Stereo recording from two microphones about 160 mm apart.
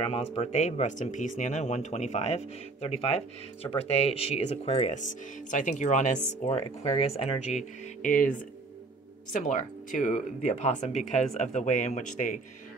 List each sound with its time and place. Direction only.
0.1 s speech: 35° left (ahead or behind); by 8.3 s 55° left (ahead or behind)
9.3 s speech: 55° left (ahead or behind)